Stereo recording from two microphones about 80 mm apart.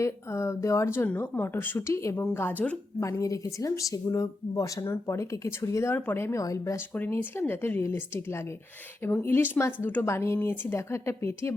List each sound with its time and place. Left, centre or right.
0.0 s speech: left
2.2 s speech: left
3.0 s speech: left
6.4 s speech: left
6.9 s speech: left